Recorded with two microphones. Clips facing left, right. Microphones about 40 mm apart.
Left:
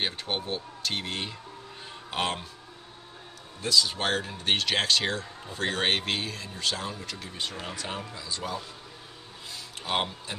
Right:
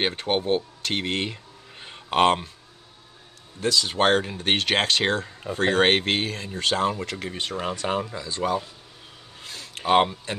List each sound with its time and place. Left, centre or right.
0.0 s speech: right
3.6 s speech: right
9.4 s a sound: right